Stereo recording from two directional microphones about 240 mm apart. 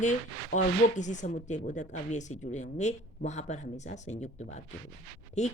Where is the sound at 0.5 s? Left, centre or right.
Left.